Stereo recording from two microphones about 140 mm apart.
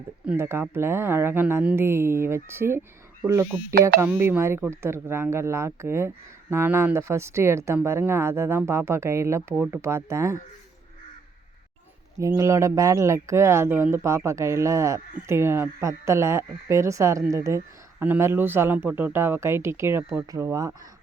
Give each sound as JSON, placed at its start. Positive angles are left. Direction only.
{"t": 0.3, "sound": "speech", "side_deg": -20}
{"t": 12.4, "sound": "speech", "side_deg": -20}